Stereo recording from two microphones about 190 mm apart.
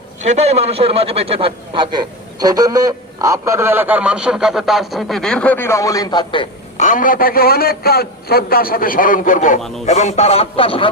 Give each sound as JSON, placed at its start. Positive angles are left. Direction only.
{"t": 0.6, "sound": "a man's voice", "side_deg": -30}
{"t": 6.7, "sound": "a man's voice", "side_deg": 40}
{"t": 9.6, "sound": "speech", "side_deg": 0}
{"t": 9.8, "sound": "speech", "side_deg": 40}